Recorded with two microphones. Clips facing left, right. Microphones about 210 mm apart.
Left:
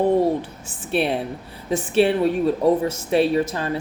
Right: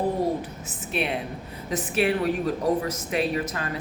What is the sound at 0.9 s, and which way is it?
A woman's voice, 35° left (ahead or behind).